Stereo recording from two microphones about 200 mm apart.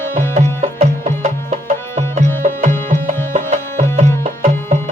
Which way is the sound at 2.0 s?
35° right (ahead or behind).